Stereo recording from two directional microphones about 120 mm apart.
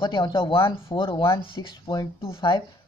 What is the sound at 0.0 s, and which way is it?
Speech, 45° left (ahead or behind).